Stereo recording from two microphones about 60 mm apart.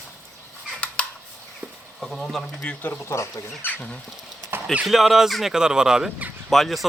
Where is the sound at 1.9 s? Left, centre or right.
Centre.